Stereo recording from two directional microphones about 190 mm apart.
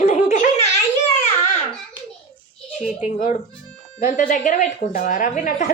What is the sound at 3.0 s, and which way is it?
A woman's voice, 45° left (ahead or behind).